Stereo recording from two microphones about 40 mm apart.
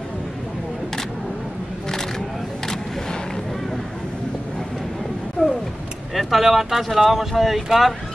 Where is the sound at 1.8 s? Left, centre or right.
Centre.